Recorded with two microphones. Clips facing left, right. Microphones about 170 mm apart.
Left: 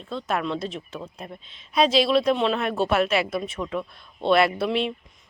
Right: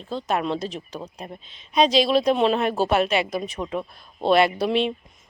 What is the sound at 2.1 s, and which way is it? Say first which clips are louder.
Speech: right 2 dB; 35° right (ahead or behind).